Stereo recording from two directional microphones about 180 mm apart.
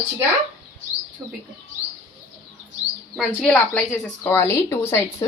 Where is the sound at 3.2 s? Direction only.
5° left (ahead or behind).